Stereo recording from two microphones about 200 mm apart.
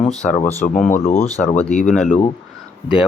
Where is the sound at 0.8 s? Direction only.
35° left (ahead or behind).